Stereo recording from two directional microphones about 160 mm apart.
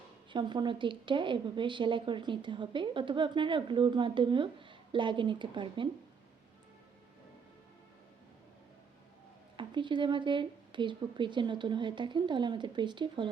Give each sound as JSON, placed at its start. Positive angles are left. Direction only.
{"t": 0.3, "sound": "a woman's voice", "side_deg": -30}
{"t": 9.6, "sound": "speech", "side_deg": -30}